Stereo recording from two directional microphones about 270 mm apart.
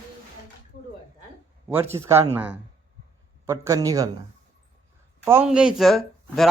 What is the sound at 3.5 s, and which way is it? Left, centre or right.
Speech, centre.